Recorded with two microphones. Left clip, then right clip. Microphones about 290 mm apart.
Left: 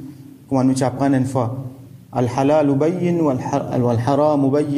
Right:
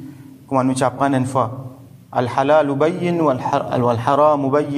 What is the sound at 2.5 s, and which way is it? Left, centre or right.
Speech, right.